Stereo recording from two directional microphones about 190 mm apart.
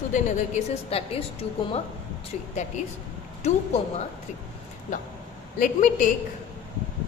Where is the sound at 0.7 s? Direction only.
30° left (ahead or behind).